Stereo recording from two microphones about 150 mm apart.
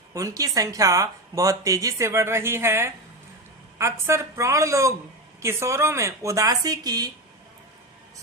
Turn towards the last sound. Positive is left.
turn(degrees=-25)  # may be behind; listen again after turning